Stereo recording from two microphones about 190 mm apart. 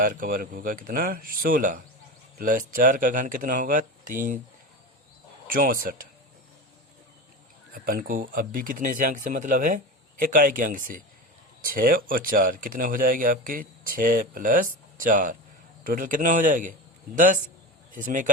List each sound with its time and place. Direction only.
0.0 s speech: 45° right (ahead or behind)
5.5 s speech: 50° right (ahead or behind)
7.7 s speech: 45° right (ahead or behind)